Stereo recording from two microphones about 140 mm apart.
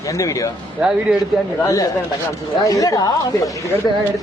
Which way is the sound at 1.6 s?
25° left (ahead or behind).